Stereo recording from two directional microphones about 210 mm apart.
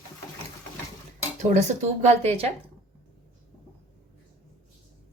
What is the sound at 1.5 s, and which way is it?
Speech, 40° right (ahead or behind).